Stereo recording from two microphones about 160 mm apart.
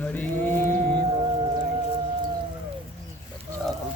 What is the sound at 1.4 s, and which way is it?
Music, 25° right (ahead or behind).